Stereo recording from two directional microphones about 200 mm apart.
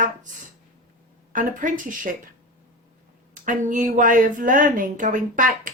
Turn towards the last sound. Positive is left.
turn(degrees=-40)  # may be behind; listen again after turning